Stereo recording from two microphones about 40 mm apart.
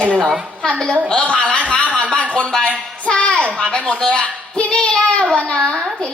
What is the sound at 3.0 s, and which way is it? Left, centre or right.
A child's voice, left.